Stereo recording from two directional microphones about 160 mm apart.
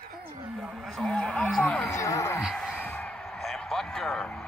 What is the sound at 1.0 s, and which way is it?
Speech, 5° left (ahead or behind).